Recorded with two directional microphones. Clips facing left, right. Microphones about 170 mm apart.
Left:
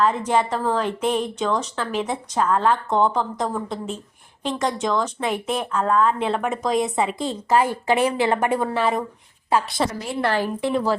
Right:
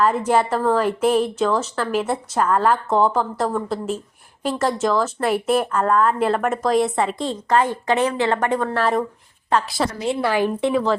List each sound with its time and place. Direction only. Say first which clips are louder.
0.0 s a woman's voice: right 2 dB; 10° right (ahead or behind)
10.2 s a woman's voice: right 1 dB; 10° right (ahead or behind)